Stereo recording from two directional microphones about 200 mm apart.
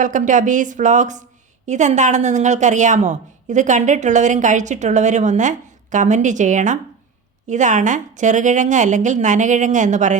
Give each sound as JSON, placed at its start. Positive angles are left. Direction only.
{"t": 0.0, "sound": "a woman's voice", "side_deg": -40}